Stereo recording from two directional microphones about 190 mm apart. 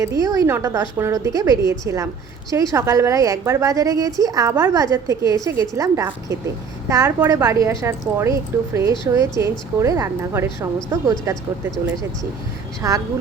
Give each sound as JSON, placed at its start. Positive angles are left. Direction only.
{"t": 0.0, "sound": "a woman's voice", "side_deg": -15}
{"t": 12.8, "sound": "a woman's voice", "side_deg": -15}